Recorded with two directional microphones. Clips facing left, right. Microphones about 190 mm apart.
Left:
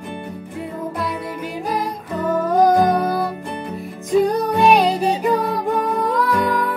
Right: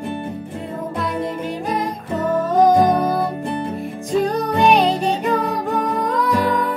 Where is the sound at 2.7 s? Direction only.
25° right (ahead or behind).